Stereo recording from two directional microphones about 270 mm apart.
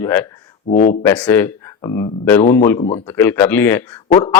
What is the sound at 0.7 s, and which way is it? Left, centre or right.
Speech, left.